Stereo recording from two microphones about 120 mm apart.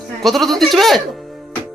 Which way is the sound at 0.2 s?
Centre (ahead or behind).